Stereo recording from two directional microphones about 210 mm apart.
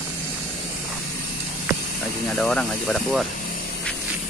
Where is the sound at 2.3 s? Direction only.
5° left (ahead or behind).